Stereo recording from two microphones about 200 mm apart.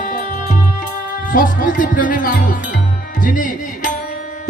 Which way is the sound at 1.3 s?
40° left (ahead or behind).